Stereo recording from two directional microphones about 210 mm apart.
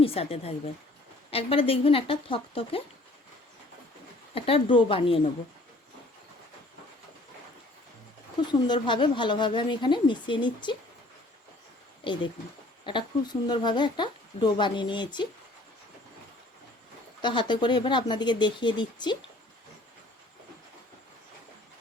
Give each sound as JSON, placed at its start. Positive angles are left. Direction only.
{"t": 0.0, "sound": "speech", "side_deg": 30}
{"t": 4.4, "sound": "speech", "side_deg": 25}
{"t": 8.4, "sound": "speech", "side_deg": 20}
{"t": 12.0, "sound": "speech", "side_deg": 25}
{"t": 17.2, "sound": "speech", "side_deg": 20}